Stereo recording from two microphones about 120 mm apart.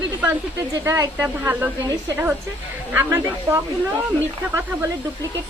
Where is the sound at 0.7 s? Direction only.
25° right (ahead or behind).